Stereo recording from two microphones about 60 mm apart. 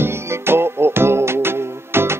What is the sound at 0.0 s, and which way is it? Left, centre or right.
Music, right.